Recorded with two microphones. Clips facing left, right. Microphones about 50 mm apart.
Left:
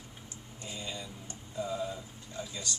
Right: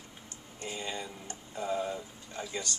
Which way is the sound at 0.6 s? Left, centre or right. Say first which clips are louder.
Right 4 dB; right.